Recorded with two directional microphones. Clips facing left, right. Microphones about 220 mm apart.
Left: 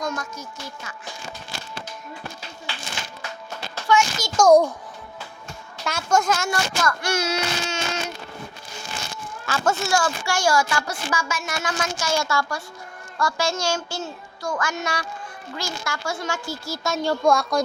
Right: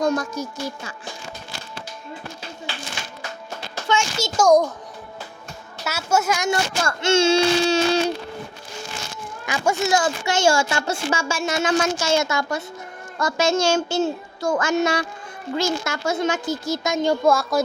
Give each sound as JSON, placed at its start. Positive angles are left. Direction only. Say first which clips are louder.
{"t": 0.0, "sound": "speech", "louder": "right 8 dB", "side_deg": -35}
{"t": 3.8, "sound": "a sound", "louder": "left 2 dB", "side_deg": -25}
{"t": 4.4, "sound": "a child's voice", "louder": "left 2 dB", "side_deg": 10}
{"t": 5.8, "sound": "a child's voice", "louder": "even", "side_deg": -5}
{"t": 6.5, "sound": "speech", "louder": "right 1 dB", "side_deg": -25}
{"t": 9.5, "sound": "speech", "louder": "right 2 dB", "side_deg": -15}
{"t": 17.2, "sound": "speech", "louder": "left 2 dB", "side_deg": -5}